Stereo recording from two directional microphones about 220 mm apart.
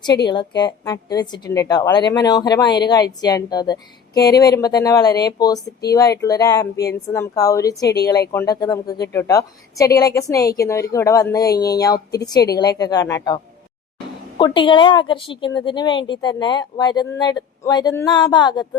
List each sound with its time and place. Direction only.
0.3 s a woman's voice: 20° left (ahead or behind)